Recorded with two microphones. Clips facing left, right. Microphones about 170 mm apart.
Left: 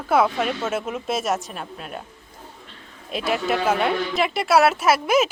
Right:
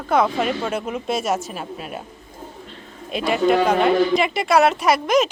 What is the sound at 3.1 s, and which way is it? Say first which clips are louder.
Speech: right 5 dB; centre (ahead or behind).